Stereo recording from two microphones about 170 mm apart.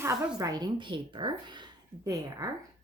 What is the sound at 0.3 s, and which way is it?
Speech, 20° right (ahead or behind).